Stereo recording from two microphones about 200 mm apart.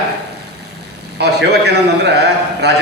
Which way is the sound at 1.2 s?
55° right (ahead or behind).